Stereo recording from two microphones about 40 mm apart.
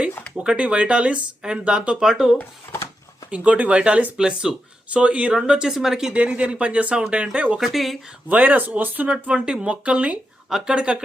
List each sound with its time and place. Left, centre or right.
0.5 s speech: right
2.0 s speech: centre
2.7 s a sound: left
3.2 s speech: right
4.2 s speech: centre
4.9 s speech: right
5.3 s speech: right
5.7 s speech: centre
6.1 s speech: right
7.6 s speech: centre
8.3 s speech: right
9.0 s speech: right